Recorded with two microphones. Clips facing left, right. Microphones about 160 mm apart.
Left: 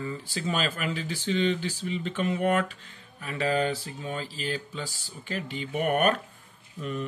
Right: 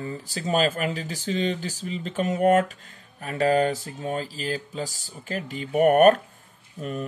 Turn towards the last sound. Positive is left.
turn(degrees=-45)  # may be behind; listen again after turning